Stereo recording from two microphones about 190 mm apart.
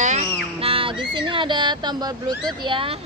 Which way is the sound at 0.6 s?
30° right (ahead or behind).